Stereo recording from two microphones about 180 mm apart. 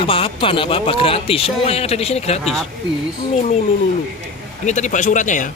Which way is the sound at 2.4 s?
Centre (ahead or behind).